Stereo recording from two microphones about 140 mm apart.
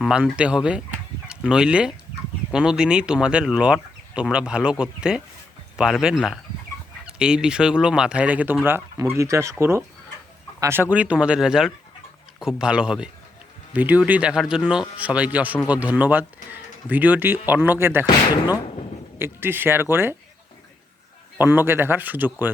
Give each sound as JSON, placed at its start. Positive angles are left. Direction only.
{"t": 0.0, "sound": "speech", "side_deg": -5}
{"t": 19.2, "sound": "speech", "side_deg": -15}
{"t": 21.3, "sound": "speech", "side_deg": -15}